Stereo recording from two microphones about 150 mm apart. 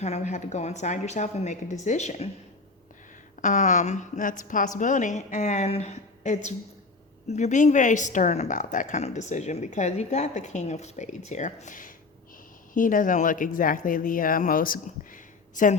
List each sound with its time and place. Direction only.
0.0 s a woman's voice: 50° left (ahead or behind)
3.4 s a woman's voice: 55° left (ahead or behind)